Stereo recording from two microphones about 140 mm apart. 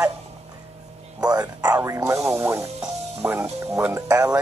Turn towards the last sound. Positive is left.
turn(degrees=-25)  # may be behind; listen again after turning